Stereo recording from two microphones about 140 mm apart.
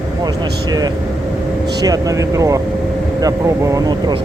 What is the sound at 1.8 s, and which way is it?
Speech, 25° right (ahead or behind).